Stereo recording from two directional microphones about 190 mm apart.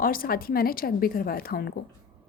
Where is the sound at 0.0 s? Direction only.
50° left (ahead or behind).